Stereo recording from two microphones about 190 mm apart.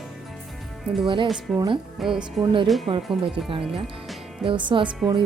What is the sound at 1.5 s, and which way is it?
Speech, 20° right (ahead or behind).